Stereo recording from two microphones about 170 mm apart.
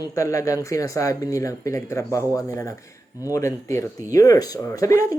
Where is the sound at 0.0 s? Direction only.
20° left (ahead or behind).